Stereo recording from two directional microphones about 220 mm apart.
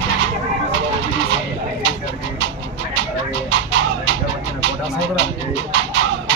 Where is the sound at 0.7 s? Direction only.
55° right (ahead or behind).